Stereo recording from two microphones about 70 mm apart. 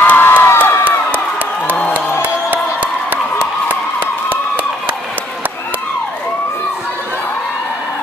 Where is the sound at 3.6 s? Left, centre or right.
Right.